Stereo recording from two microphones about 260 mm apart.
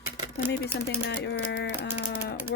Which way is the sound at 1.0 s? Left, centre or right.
Left.